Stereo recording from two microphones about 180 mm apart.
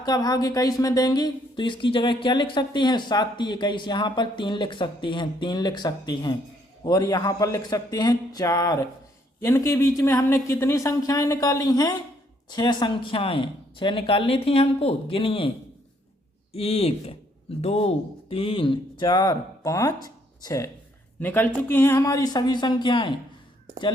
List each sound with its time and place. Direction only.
0.0 s a woman's voice: 20° left (ahead or behind)